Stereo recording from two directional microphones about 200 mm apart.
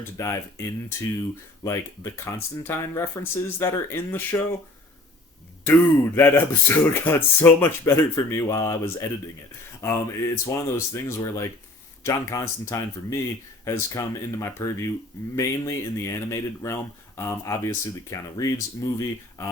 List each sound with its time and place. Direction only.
0.2 s speech: 15° left (ahead or behind)
6.1 s speech: 10° left (ahead or behind)